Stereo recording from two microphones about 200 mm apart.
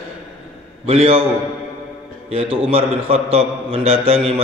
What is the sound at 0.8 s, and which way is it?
Speech, 30° right (ahead or behind).